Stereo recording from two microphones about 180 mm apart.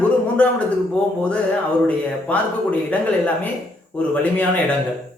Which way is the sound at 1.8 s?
5° left (ahead or behind).